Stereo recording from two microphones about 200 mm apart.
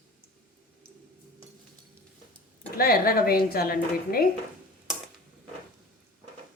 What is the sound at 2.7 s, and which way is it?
Speech, 50° left (ahead or behind).